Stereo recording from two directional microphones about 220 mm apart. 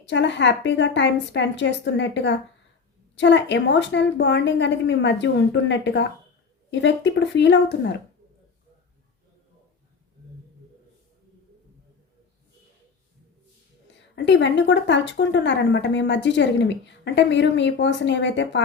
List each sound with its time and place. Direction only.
0.1 s a woman's voice: 55° left (ahead or behind)
14.2 s a woman's voice: 55° left (ahead or behind)